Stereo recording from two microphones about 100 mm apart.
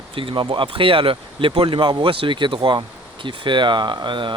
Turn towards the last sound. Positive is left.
turn(degrees=-55)  # may be behind; listen again after turning